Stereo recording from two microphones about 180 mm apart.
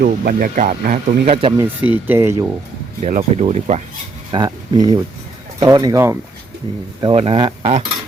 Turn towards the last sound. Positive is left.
turn(degrees=-30)  # may be behind; listen again after turning